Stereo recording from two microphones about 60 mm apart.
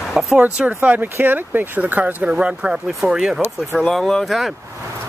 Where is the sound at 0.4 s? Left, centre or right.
Right.